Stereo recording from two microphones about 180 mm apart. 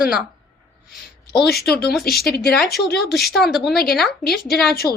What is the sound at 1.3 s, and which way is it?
A woman's voice, 65° left (ahead or behind).